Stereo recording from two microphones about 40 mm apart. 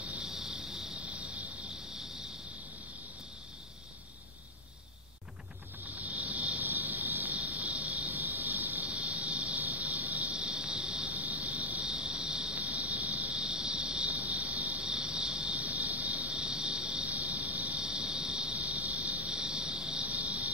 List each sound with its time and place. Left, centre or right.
0.2 s cricket: centre
0.9 s vehicle: right
5.9 s cricket: right
10.3 s cricket: right
11.8 s cricket: right
12.5 s cricket: right
14.9 s cricket: right
16.3 s cricket: right
18.6 s cricket: right
19.3 s cricket: right
20.0 s cricket: right